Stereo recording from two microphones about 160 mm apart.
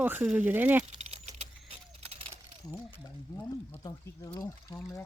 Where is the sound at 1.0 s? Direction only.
45° right (ahead or behind).